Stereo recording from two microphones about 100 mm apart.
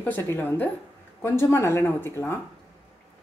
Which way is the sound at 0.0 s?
20° left (ahead or behind).